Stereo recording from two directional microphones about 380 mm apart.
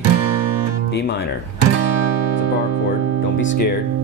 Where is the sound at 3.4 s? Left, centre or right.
Left.